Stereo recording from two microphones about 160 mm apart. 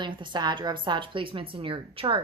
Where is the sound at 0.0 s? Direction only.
30° right (ahead or behind).